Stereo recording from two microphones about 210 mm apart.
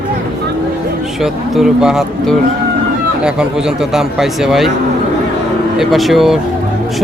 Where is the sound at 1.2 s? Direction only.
Centre (ahead or behind).